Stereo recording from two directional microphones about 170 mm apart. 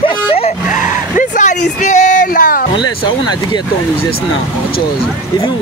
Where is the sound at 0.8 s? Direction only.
50° left (ahead or behind).